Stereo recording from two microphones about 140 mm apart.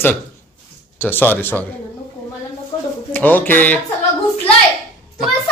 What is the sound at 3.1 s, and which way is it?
Speech, 15° left (ahead or behind).